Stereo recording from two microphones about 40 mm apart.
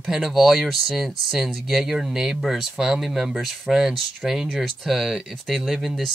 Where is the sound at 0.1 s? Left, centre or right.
Centre.